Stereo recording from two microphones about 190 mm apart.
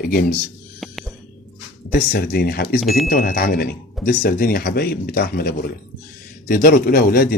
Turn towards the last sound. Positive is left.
turn(degrees=50)  # may be behind; listen again after turning